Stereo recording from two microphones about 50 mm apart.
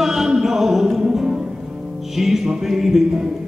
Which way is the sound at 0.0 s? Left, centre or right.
Centre.